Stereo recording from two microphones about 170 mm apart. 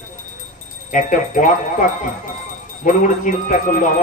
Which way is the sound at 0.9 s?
50° left (ahead or behind).